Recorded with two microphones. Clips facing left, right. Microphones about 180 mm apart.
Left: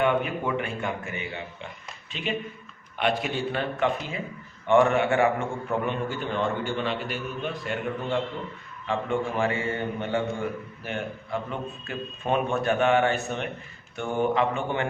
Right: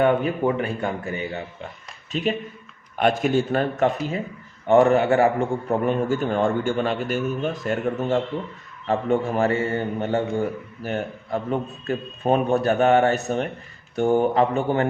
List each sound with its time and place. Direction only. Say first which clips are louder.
0.0 s a man's voice: right 5 dB; 35° right (ahead or behind)